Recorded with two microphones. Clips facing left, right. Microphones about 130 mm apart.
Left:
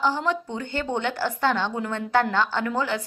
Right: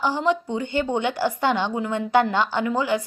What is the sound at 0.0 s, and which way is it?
A woman's voice, 15° right (ahead or behind).